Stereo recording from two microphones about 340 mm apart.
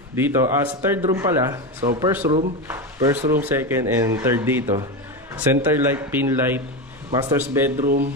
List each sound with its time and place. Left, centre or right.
0.1 s a man's voice: centre
7.7 s speech: right